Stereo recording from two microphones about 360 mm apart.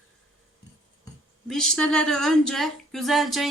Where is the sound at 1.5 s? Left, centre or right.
Centre.